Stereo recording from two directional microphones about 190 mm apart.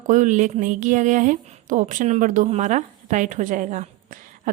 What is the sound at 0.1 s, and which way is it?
Speech, 40° right (ahead or behind).